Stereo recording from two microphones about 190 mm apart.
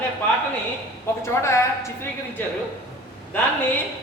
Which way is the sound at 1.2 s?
15° left (ahead or behind).